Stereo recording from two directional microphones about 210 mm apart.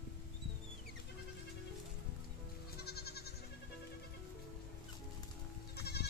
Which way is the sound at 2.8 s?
50° left (ahead or behind).